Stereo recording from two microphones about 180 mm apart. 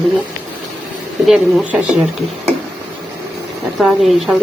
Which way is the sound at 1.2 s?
5° right (ahead or behind).